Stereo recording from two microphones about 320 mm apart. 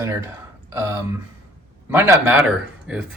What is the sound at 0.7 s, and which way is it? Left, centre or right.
Speech, centre.